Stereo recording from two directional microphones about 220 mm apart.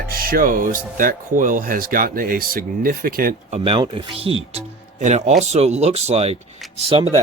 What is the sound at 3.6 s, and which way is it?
Speech, 25° right (ahead or behind).